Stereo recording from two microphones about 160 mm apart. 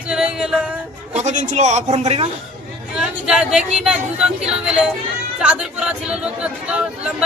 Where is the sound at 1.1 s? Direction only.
45° right (ahead or behind).